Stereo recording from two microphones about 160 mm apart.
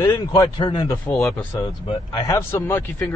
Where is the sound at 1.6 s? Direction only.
25° left (ahead or behind).